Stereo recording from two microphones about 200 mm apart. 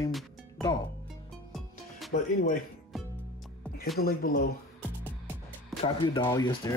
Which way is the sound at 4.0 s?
50° left (ahead or behind).